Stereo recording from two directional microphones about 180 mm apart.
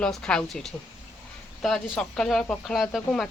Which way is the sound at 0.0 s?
5° left (ahead or behind).